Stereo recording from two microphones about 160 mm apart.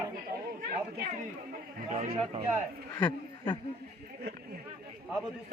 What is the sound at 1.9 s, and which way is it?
Speech, 40° right (ahead or behind).